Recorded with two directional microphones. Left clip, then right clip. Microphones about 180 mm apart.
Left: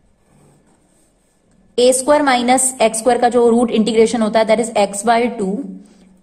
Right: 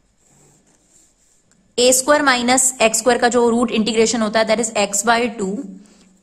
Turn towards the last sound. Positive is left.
turn(degrees=-20)  # may be behind; listen again after turning